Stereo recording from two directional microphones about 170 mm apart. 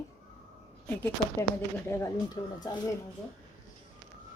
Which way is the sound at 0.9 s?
10° left (ahead or behind).